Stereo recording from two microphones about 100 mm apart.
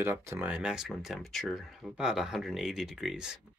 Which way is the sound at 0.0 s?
20° right (ahead or behind).